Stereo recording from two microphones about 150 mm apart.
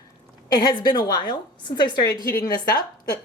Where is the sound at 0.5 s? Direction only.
25° left (ahead or behind).